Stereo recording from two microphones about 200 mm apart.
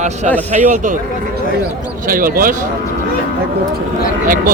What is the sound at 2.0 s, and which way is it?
Speech, 45° right (ahead or behind).